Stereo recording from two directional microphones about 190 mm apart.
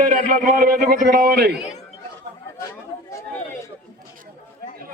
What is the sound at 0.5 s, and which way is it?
A man's voice, 50° right (ahead or behind).